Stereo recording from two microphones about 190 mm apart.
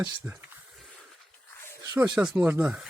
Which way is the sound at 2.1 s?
5° right (ahead or behind).